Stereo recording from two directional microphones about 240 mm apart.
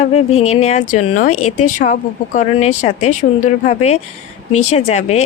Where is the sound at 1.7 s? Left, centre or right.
Left.